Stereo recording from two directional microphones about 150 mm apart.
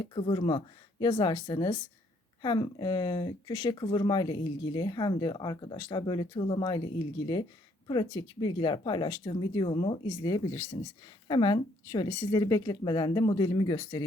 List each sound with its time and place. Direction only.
0.1 s speech: 35° left (ahead or behind)